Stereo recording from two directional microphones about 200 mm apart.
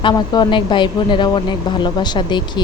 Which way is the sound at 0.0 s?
25° left (ahead or behind).